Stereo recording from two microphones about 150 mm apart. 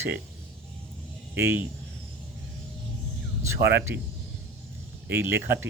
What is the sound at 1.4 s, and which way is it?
Speech, 15° right (ahead or behind).